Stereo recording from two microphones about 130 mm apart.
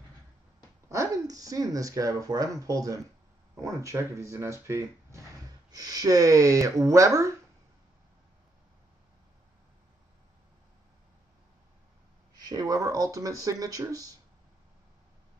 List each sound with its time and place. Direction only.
0.8 s speech: 25° right (ahead or behind)
12.4 s speech: 30° right (ahead or behind)